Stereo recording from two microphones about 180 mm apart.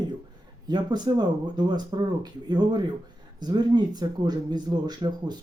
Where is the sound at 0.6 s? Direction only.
25° right (ahead or behind).